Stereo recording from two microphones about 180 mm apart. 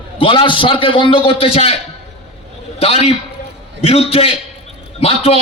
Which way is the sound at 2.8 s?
35° left (ahead or behind).